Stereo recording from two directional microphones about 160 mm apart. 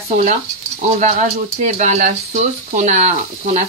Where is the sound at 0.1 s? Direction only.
50° right (ahead or behind).